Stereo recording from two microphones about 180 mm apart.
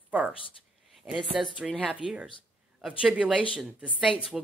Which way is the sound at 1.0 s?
10° right (ahead or behind).